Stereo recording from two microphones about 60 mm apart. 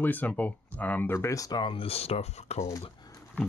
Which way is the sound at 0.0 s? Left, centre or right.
Left.